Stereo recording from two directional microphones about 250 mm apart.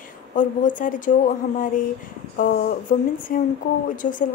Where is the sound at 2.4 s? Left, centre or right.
Left.